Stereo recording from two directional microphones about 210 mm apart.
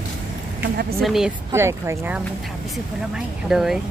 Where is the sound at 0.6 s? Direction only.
50° right (ahead or behind).